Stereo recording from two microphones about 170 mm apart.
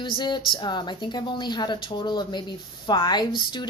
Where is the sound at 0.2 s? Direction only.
25° left (ahead or behind).